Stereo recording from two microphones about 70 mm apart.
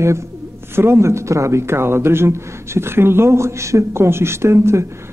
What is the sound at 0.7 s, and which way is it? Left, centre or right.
Speech, right.